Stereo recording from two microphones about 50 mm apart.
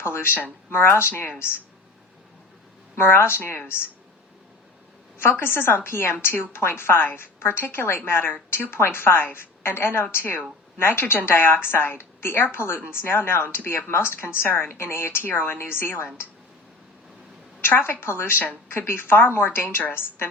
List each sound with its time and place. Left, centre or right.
0.0 s a sound: left
0.7 s a woman's voice: left
2.9 s a woman's voice: left
5.4 s a woman's voice: left
15.3 s a woman's voice: left
15.5 s a woman's voice: left
17.6 s a woman's voice: left